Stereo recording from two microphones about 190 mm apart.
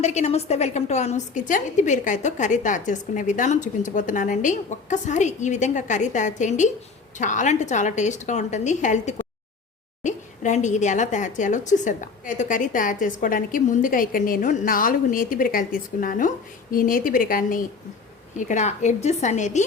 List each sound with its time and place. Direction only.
0.0 s a woman's voice: 35° left (ahead or behind)